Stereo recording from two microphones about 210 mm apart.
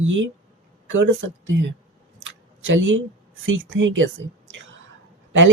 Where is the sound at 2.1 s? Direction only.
65° right (ahead or behind).